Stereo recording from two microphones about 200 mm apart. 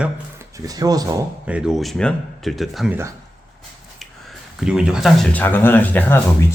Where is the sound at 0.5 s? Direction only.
20° right (ahead or behind).